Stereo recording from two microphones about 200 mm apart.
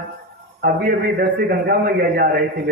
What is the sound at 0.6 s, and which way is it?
A man's voice, 45° right (ahead or behind).